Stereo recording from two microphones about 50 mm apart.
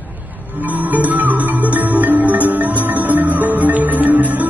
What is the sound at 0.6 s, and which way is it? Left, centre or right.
Music, right.